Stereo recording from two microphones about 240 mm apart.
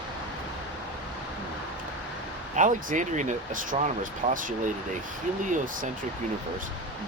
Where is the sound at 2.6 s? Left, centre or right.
Right.